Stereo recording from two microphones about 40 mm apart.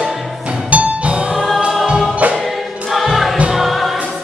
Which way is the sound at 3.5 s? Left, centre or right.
Centre.